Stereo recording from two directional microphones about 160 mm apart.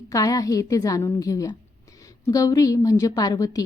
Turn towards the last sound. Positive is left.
turn(degrees=25)  # may be behind; listen again after turning